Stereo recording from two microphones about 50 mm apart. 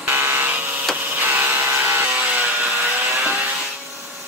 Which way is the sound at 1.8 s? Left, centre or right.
Right.